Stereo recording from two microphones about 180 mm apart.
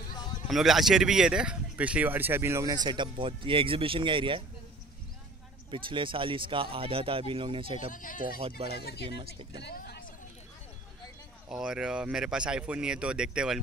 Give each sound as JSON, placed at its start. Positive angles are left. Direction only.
{"t": 0.1, "sound": "a sound", "side_deg": 25}
{"t": 0.5, "sound": "speech", "side_deg": 0}
{"t": 5.7, "sound": "speech", "side_deg": -30}
{"t": 7.9, "sound": "speech", "side_deg": 50}
{"t": 8.4, "sound": "speech", "side_deg": -35}
{"t": 8.8, "sound": "speech", "side_deg": 65}
{"t": 9.2, "sound": "speech", "side_deg": -30}
{"t": 9.6, "sound": "vehicle", "side_deg": 65}
{"t": 11.4, "sound": "speech", "side_deg": -5}